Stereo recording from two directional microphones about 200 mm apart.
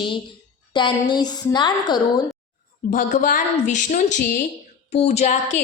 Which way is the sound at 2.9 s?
40° left (ahead or behind).